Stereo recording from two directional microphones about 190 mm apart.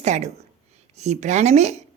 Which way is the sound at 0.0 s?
35° right (ahead or behind).